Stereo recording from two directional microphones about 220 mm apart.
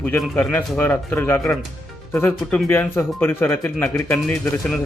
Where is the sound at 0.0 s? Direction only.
5° left (ahead or behind).